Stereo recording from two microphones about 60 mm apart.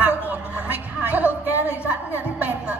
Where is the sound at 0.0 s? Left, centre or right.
Right.